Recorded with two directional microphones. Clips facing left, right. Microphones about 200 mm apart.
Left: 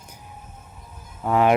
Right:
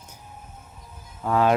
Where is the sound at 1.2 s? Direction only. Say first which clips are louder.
Left 2 dB; 15° left (ahead or behind).